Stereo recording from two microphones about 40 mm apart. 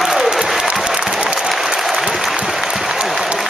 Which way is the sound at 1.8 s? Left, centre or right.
Centre.